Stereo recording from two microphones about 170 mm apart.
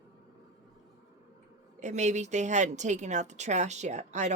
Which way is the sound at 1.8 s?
45° right (ahead or behind).